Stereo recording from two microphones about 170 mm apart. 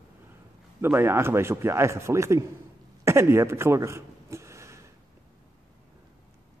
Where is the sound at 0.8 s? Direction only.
15° right (ahead or behind).